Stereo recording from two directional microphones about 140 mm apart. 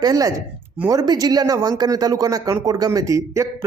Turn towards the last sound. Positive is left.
turn(degrees=-20)  # may be behind; listen again after turning